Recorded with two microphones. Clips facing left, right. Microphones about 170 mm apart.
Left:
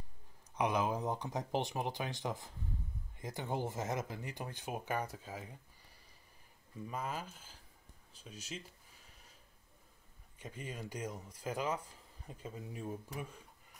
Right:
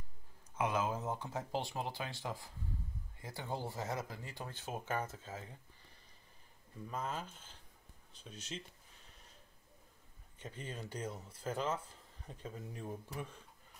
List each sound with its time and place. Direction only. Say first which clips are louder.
0.6 s speech: left 2 dB; 15° left (ahead or behind)
6.9 s speech: even; 10° left (ahead or behind)
10.4 s speech: left 1 dB; 10° left (ahead or behind)